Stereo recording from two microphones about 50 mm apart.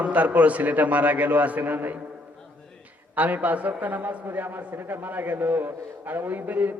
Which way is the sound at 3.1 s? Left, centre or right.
Right.